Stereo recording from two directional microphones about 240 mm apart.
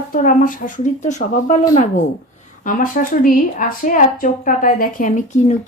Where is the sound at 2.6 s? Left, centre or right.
Left.